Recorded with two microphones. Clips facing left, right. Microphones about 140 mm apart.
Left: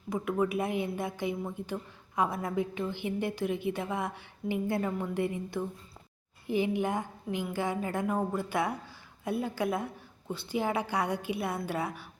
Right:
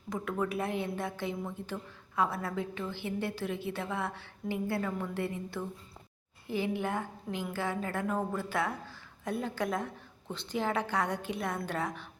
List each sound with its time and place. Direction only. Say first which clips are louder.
0.1 s a woman's voice: left 4 dB; 10° left (ahead or behind)